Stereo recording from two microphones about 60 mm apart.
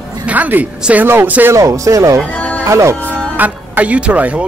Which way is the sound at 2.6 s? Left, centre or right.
Right.